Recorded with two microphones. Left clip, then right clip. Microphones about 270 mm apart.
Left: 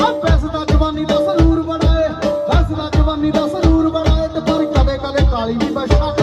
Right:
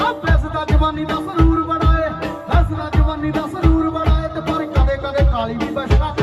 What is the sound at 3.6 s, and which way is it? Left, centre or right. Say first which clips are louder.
Music: left 3 dB; left.